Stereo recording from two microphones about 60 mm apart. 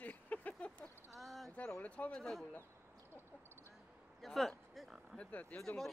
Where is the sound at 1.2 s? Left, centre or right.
Centre.